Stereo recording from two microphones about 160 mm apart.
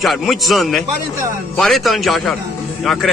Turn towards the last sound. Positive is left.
turn(degrees=0)  # may be behind; listen again after turning